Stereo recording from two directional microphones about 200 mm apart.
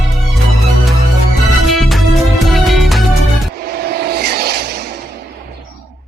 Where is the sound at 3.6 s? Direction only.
50° right (ahead or behind).